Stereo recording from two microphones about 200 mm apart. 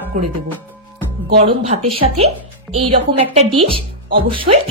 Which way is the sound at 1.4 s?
30° right (ahead or behind).